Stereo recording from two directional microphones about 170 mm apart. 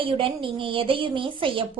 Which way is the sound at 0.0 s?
30° right (ahead or behind).